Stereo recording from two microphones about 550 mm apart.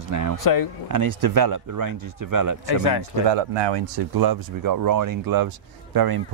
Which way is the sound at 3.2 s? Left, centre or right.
Right.